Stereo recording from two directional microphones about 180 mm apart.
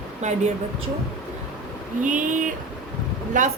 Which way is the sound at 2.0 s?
45° right (ahead or behind).